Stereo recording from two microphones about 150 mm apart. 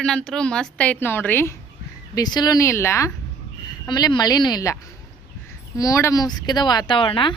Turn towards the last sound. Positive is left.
turn(degrees=35)  # may be behind; listen again after turning